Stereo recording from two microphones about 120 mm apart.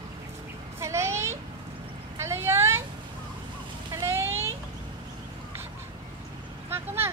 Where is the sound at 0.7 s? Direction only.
25° right (ahead or behind).